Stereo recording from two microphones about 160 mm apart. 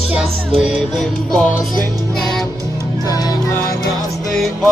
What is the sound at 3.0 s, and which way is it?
Music, 25° left (ahead or behind).